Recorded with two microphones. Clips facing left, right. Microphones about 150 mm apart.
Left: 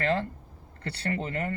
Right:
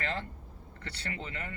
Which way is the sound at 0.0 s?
35° left (ahead or behind).